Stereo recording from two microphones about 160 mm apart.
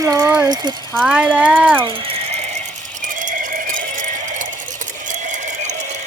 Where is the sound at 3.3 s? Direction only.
55° right (ahead or behind).